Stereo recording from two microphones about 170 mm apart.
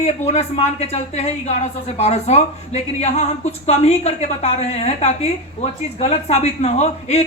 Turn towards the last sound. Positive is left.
turn(degrees=40)  # may be behind; listen again after turning